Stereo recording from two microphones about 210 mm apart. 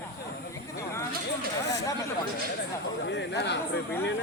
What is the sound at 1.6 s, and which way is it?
Speech, 55° left (ahead or behind).